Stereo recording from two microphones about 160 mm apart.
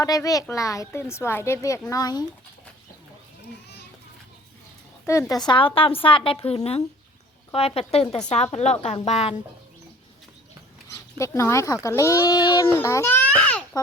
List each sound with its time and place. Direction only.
0.0 s a woman's voice: 20° left (ahead or behind)
5.3 s a woman's voice: 30° left (ahead or behind); by 9.4 s 45° left (ahead or behind)
10.8 s speech: 20° left (ahead or behind)